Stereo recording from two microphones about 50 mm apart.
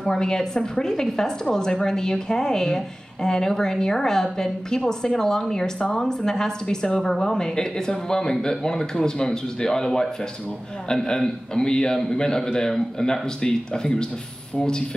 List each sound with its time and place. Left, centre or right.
0.0 s a woman's voice: centre